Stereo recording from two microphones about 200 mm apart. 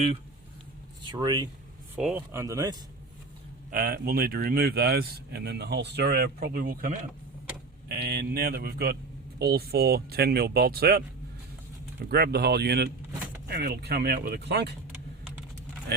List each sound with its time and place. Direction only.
1.0 s speech: 20° right (ahead or behind)
2.0 s speech: centre (ahead or behind)
2.3 s speech: 15° right (ahead or behind)
3.7 s speech: 45° right (ahead or behind)
12.1 s speech: 55° right (ahead or behind)